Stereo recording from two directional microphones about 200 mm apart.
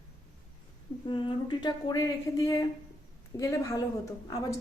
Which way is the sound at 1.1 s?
25° left (ahead or behind).